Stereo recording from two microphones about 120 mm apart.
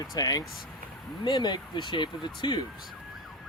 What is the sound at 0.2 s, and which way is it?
Speech, 35° left (ahead or behind).